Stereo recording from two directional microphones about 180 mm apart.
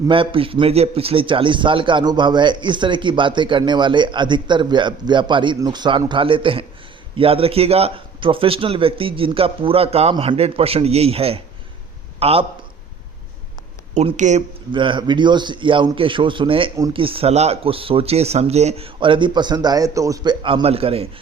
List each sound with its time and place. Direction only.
0.1 s a man's voice: 30° right (ahead or behind)
13.9 s a man's voice: 40° right (ahead or behind)
14.7 s a man's voice: 25° right (ahead or behind)
16.7 s a man's voice: 20° right (ahead or behind)
17.0 s a man's voice: 30° right (ahead or behind)